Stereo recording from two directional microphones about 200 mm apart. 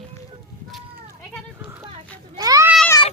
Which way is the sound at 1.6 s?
15° right (ahead or behind).